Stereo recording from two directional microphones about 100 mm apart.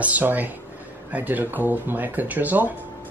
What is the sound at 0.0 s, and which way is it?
Speech, 15° right (ahead or behind).